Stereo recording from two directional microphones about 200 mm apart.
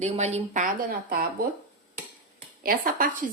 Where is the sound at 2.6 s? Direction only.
45° right (ahead or behind).